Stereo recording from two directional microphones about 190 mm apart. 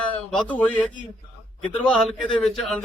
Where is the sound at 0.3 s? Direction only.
5° left (ahead or behind).